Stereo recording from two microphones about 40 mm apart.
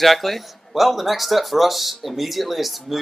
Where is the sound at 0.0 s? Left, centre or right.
Centre.